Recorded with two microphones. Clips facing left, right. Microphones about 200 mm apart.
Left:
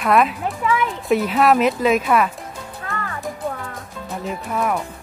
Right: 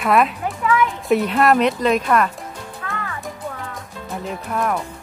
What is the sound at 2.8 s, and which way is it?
Music, 35° left (ahead or behind).